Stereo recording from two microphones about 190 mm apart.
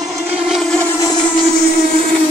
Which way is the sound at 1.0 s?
20° left (ahead or behind).